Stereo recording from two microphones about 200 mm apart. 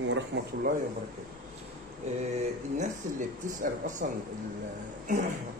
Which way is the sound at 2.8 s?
40° right (ahead or behind).